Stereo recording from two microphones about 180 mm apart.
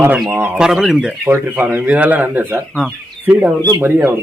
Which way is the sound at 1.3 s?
10° right (ahead or behind).